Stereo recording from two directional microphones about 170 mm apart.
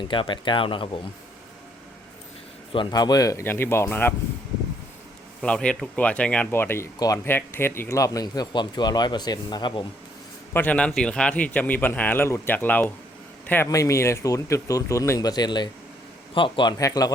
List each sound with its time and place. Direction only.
0.1 s speech: 30° left (ahead or behind)
2.7 s speech: 25° left (ahead or behind)
5.4 s speech: 5° left (ahead or behind); by 9.8 s 25° left (ahead or behind)
10.5 s speech: 10° left (ahead or behind)